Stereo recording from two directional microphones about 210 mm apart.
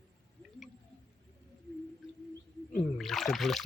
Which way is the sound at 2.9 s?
Centre (ahead or behind).